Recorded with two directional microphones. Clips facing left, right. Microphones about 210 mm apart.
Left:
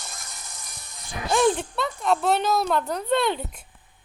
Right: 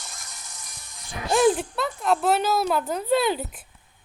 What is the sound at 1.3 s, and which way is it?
Speech, 5° right (ahead or behind).